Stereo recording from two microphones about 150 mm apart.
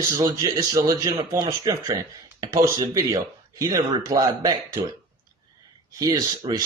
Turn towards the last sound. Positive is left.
turn(degrees=-25)  # may be behind; listen again after turning